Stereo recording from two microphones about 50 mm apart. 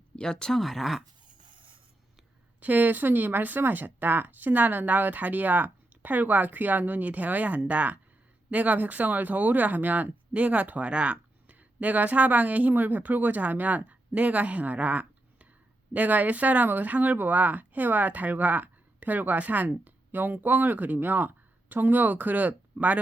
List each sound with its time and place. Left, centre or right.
0.2 s speech: centre
0.6 s speech: centre
2.6 s speech: right